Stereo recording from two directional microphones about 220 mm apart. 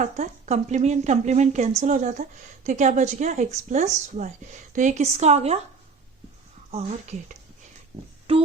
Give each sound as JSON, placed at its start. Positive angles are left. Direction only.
{"t": 0.0, "sound": "a woman's voice", "side_deg": -30}
{"t": 8.3, "sound": "child singing", "side_deg": -25}